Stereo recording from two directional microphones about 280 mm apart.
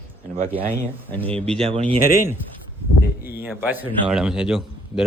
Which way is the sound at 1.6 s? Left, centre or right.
Right.